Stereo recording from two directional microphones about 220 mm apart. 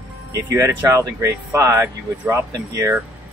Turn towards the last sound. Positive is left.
turn(degrees=-10)  # may be behind; listen again after turning